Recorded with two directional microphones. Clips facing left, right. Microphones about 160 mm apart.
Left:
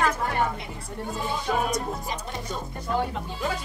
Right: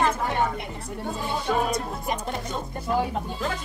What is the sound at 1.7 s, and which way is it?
Speech, 55° right (ahead or behind).